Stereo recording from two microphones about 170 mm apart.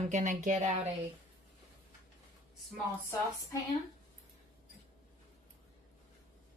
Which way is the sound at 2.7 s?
15° left (ahead or behind).